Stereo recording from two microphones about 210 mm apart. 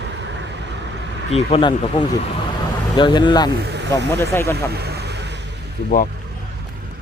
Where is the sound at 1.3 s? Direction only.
30° left (ahead or behind).